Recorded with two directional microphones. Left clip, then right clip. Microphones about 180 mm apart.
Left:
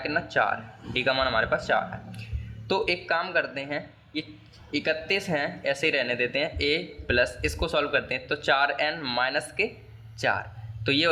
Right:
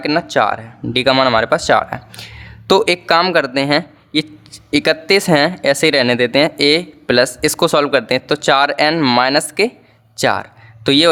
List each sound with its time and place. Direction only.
0.0 s speech: 45° right (ahead or behind)